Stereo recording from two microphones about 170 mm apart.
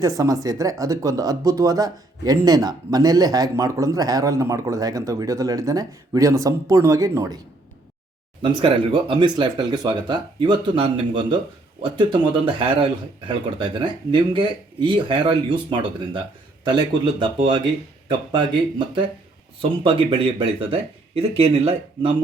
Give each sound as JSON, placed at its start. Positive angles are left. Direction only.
{"t": 0.0, "sound": "speech", "side_deg": -20}
{"t": 8.4, "sound": "speech", "side_deg": -30}
{"t": 12.5, "sound": "speech", "side_deg": -30}
{"t": 19.8, "sound": "speech", "side_deg": -30}